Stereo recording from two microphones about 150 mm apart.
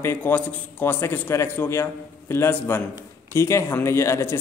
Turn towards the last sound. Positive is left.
turn(degrees=15)  # may be behind; listen again after turning